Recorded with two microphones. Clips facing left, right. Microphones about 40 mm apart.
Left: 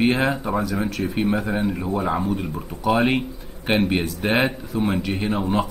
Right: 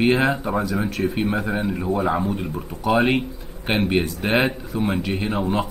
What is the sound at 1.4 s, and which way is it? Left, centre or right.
Speech, centre.